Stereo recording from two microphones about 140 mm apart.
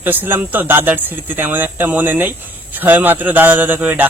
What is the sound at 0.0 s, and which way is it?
A man's voice, 15° right (ahead or behind).